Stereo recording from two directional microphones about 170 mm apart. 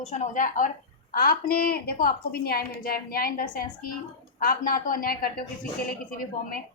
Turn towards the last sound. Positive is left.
turn(degrees=55)  # may be behind; listen again after turning